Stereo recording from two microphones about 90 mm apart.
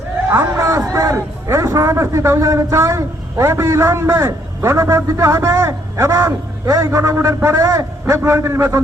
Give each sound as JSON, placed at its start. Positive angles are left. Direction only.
{"t": 0.5, "sound": "a man's voice", "side_deg": -30}